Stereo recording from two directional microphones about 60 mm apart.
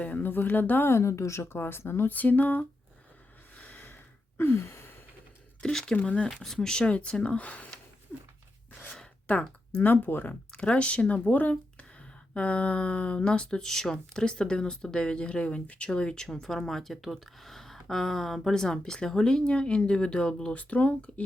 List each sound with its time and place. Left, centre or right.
0.0 s speech: left
0.9 s a woman's voice: left
2.0 s speech: left
3.6 s gasp: left
4.4 s gasp: left
5.7 s speech: centre
6.0 s speech: left
6.3 s speech: centre; by 7.7 s left
9.3 s speech: left
9.8 s speech: left